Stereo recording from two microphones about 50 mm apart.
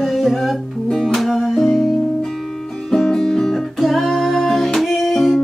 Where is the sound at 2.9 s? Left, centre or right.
Centre.